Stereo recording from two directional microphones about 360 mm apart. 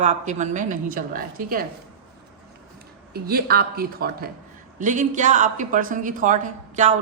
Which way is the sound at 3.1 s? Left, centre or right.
Right.